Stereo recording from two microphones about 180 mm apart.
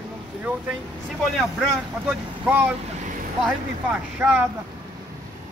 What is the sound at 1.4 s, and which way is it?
Speech, centre (ahead or behind).